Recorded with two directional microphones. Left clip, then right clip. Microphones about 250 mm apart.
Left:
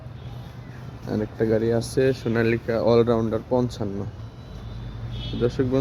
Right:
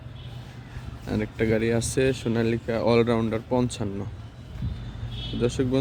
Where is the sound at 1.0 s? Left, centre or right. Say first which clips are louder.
Left 2 dB; centre.